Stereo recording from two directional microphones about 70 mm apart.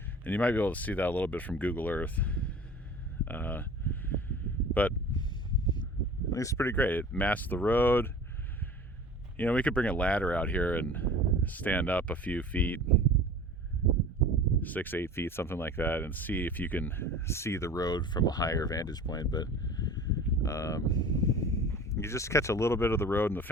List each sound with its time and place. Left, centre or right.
0.3 s speech: left
3.2 s a sound: left
6.3 s speech: left
6.7 s speech: left
9.4 s speech: centre
14.6 s speech: left
17.7 s speech: left
20.4 s speech: left